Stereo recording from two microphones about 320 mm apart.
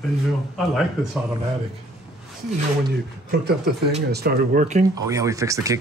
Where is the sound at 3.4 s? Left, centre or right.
Right.